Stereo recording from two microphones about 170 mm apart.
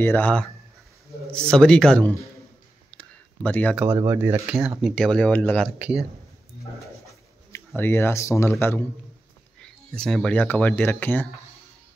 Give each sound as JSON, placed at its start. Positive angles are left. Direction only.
{"t": 0.0, "sound": "speech", "side_deg": 10}
{"t": 2.9, "sound": "a sound", "side_deg": 5}
{"t": 3.7, "sound": "speech", "side_deg": -10}
{"t": 5.8, "sound": "speech", "side_deg": -5}
{"t": 7.1, "sound": "speech", "side_deg": 15}